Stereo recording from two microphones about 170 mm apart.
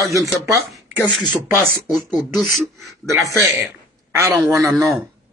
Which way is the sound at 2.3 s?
Centre (ahead or behind).